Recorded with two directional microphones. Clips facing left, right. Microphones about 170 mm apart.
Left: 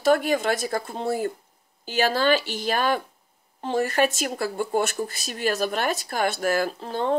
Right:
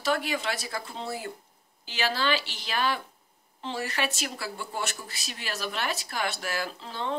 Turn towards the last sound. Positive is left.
turn(degrees=50)  # may be behind; listen again after turning